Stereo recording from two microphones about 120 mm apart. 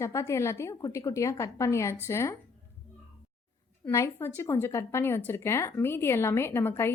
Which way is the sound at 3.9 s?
25° left (ahead or behind).